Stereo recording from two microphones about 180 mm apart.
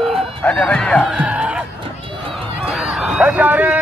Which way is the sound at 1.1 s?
5° right (ahead or behind).